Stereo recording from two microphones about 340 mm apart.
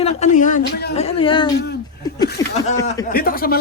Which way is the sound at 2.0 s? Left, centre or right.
Centre.